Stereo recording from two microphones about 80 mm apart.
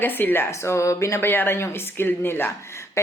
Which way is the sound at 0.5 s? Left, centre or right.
Left.